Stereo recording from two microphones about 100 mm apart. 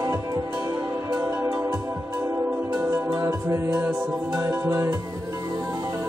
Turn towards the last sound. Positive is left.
turn(degrees=-25)  # may be behind; listen again after turning